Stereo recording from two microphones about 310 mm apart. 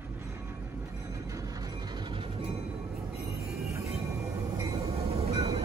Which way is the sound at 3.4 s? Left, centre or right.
Centre.